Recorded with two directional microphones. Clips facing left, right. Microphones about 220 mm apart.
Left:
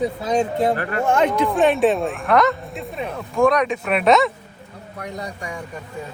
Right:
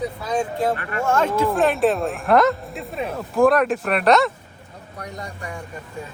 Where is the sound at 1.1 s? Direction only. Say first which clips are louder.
Left 1 dB; 15° left (ahead or behind).